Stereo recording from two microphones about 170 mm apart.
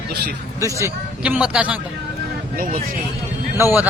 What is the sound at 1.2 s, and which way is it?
Speech, 5° right (ahead or behind).